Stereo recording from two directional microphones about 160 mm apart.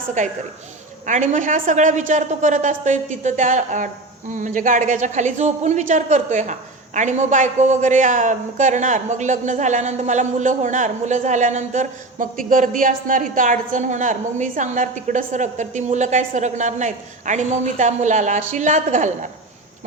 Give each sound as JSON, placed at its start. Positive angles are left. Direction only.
{"t": 0.2, "sound": "a woman's voice", "side_deg": -55}